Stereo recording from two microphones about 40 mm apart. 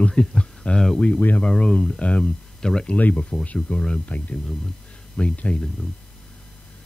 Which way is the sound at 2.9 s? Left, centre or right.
Left.